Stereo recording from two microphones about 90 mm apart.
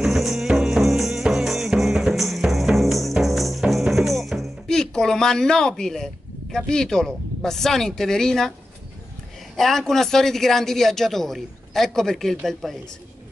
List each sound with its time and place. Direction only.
0.0 s music: 5° right (ahead or behind)
6.5 s a man's voice: 5° left (ahead or behind)
9.6 s a man's voice: 5° left (ahead or behind)